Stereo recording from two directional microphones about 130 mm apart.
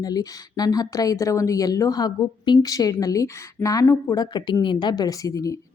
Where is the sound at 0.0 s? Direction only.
30° left (ahead or behind).